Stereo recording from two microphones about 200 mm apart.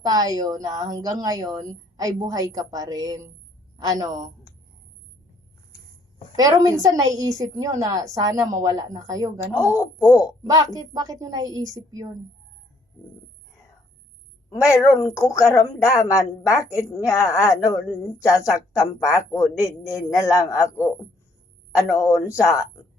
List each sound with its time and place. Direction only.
0.0 s a woman's voice: 20° right (ahead or behind)
6.3 s a woman's voice: 20° right (ahead or behind)
9.5 s speech: 15° left (ahead or behind)
10.4 s a woman's voice: 20° right (ahead or behind)
14.5 s speech: 15° left (ahead or behind)
18.8 s speech: 15° left (ahead or behind)
21.9 s speech: 15° left (ahead or behind)